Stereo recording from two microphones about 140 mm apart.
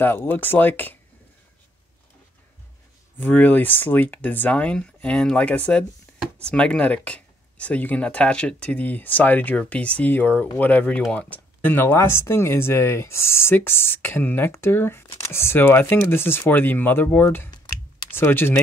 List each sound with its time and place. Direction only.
0.0 s speech: 15° left (ahead or behind)
3.2 s speech: 15° left (ahead or behind)